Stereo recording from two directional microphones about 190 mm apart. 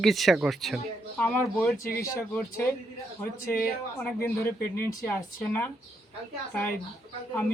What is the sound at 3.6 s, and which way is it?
Speech, centre (ahead or behind).